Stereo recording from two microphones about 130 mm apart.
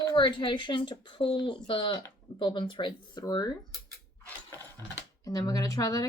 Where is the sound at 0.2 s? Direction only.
40° left (ahead or behind).